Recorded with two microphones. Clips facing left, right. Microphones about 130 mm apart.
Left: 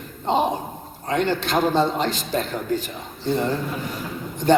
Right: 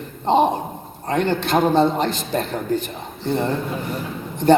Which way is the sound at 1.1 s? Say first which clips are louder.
Right 2 dB; 55° right (ahead or behind).